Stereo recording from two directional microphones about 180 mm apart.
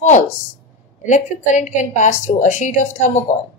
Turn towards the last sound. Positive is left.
turn(degrees=40)  # may be behind; listen again after turning